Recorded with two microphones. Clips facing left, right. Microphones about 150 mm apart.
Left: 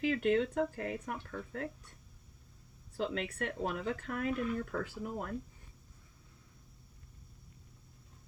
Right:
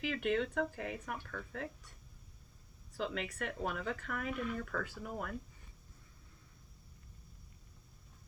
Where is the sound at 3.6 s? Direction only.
35° left (ahead or behind).